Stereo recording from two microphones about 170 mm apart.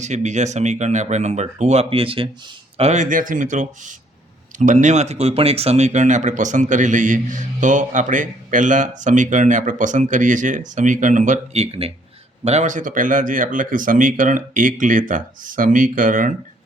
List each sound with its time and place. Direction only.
0.0 s speech: 45° right (ahead or behind)
2.7 s speech: 40° right (ahead or behind)